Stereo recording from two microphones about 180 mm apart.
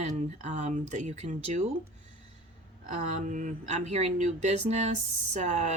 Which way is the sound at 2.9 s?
40° right (ahead or behind).